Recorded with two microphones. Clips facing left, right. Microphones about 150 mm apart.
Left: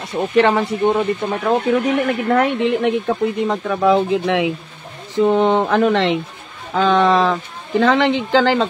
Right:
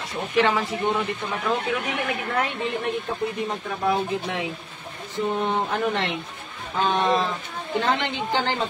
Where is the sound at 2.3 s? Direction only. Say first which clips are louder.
Left 12 dB; 75° left (ahead or behind).